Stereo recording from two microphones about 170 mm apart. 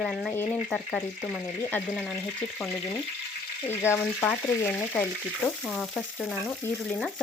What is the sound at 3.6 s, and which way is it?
Speech, 15° left (ahead or behind).